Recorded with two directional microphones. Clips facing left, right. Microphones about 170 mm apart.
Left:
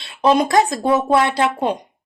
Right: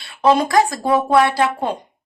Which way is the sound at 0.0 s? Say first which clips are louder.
Even; 20° left (ahead or behind).